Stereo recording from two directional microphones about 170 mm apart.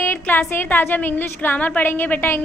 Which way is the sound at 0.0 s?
10° left (ahead or behind).